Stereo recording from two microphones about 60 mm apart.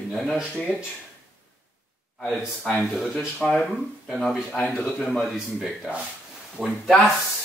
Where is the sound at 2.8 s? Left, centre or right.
Centre.